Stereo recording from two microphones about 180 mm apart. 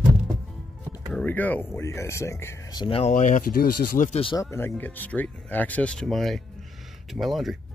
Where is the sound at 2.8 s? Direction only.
30° left (ahead or behind).